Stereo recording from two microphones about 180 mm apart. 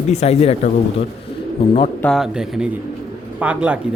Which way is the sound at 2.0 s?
5° left (ahead or behind).